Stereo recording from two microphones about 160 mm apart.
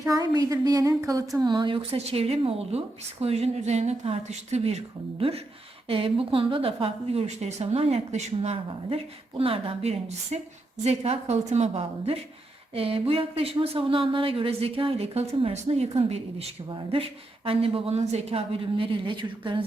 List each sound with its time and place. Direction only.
0.0 s a woman's voice: 20° right (ahead or behind)